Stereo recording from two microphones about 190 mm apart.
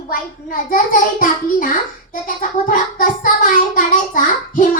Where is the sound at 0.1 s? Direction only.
45° left (ahead or behind).